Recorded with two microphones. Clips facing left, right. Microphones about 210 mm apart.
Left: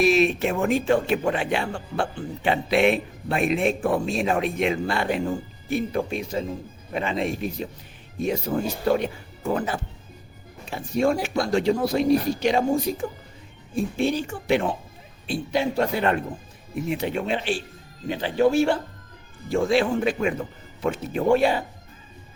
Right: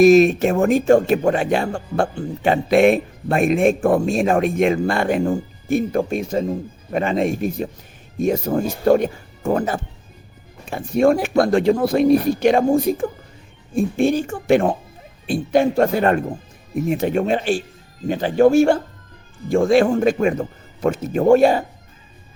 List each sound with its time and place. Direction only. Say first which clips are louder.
0.0 s speech: right 8 dB; 45° right (ahead or behind)